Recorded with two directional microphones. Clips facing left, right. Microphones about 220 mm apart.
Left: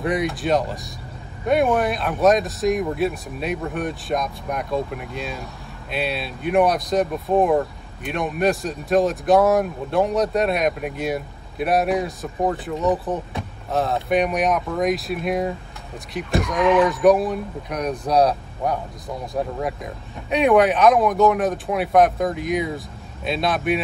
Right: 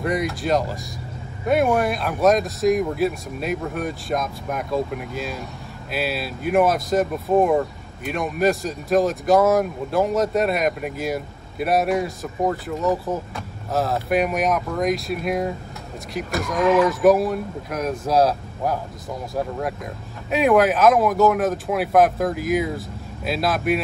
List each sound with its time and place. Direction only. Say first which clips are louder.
0.0 s speech: left 1 dB; centre (ahead or behind)